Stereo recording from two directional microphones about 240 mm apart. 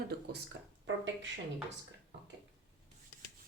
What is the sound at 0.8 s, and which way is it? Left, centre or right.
Speech, right.